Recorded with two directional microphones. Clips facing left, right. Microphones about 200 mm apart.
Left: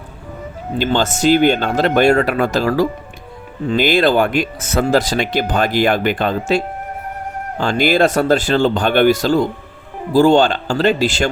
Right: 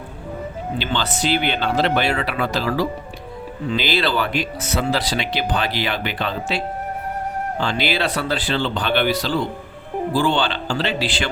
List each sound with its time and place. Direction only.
0.8 s speech: 45° left (ahead or behind)
7.6 s speech: 45° left (ahead or behind)